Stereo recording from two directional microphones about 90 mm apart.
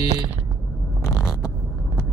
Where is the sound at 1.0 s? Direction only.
35° left (ahead or behind).